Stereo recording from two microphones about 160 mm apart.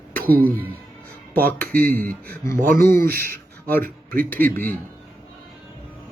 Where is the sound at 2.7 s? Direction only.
60° right (ahead or behind).